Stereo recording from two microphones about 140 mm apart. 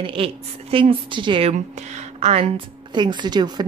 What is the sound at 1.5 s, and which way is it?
Speech, 55° right (ahead or behind).